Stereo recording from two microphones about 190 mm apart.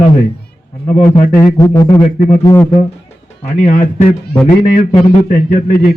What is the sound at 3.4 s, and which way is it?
Speech, 35° left (ahead or behind).